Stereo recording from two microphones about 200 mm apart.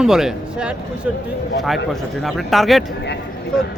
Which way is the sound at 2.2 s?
Centre (ahead or behind).